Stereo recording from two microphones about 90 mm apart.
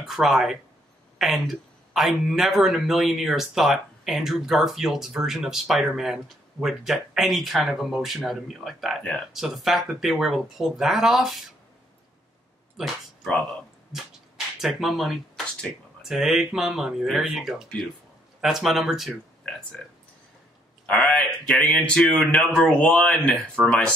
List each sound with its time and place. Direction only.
0.0 s speech: 5° right (ahead or behind)
12.7 s speech: centre (ahead or behind)
13.9 s a sound: 5° right (ahead or behind)
16.0 s speech: 5° right (ahead or behind)
20.8 s speech: 20° left (ahead or behind)
22.2 s speech: 20° left (ahead or behind)